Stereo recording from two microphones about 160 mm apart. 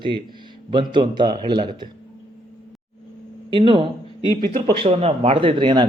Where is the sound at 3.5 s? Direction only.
30° right (ahead or behind).